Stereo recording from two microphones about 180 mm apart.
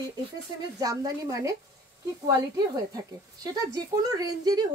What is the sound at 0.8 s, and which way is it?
A woman's voice, 20° right (ahead or behind).